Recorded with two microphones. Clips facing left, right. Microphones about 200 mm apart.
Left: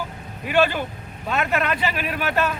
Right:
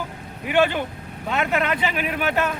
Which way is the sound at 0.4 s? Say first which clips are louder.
Even; 20° right (ahead or behind).